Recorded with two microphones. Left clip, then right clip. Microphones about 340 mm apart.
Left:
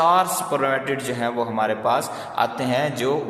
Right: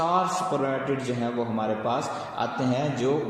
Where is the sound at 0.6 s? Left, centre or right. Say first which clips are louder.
Left 5 dB; left.